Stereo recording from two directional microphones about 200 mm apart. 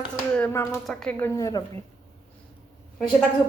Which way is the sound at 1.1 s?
15° left (ahead or behind).